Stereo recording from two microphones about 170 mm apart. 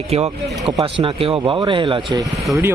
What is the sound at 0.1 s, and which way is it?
Speech, 35° right (ahead or behind).